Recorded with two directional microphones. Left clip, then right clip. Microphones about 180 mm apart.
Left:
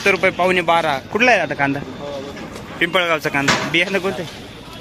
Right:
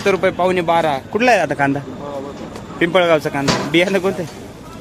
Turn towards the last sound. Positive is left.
turn(degrees=-15)  # may be behind; listen again after turning